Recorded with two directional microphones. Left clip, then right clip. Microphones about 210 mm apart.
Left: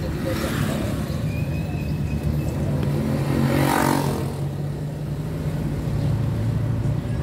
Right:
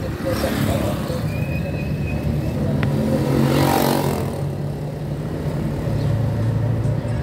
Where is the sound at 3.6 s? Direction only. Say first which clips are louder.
Right 1 dB; 45° right (ahead or behind).